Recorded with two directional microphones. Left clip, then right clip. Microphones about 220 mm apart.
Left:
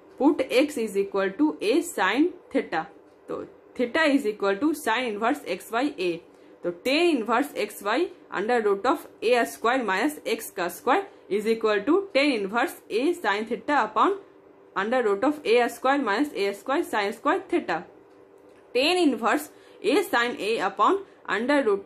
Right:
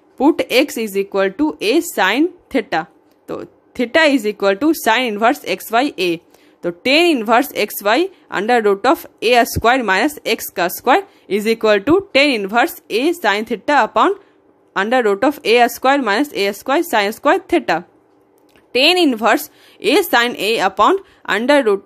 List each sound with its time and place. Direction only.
0.2 s speech: 45° right (ahead or behind)